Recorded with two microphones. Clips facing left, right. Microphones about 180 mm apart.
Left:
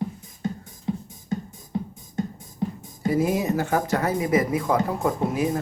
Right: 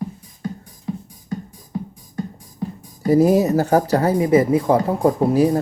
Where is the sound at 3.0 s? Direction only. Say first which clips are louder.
Right 8 dB; 40° right (ahead or behind).